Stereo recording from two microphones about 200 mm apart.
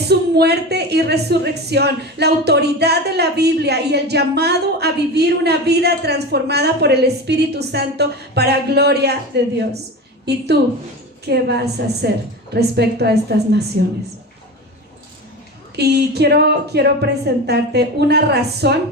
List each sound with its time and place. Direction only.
0.1 s a woman's voice: 55° right (ahead or behind)
15.7 s a woman's voice: 55° right (ahead or behind)